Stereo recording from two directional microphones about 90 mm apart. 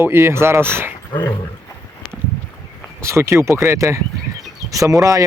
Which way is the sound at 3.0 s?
35° right (ahead or behind).